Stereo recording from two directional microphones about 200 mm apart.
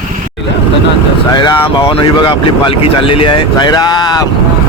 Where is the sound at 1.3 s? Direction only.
25° left (ahead or behind).